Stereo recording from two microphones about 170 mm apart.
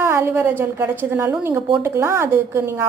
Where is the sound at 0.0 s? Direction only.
15° right (ahead or behind).